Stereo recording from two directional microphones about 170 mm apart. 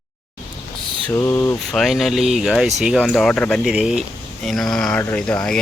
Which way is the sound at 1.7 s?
Centre (ahead or behind).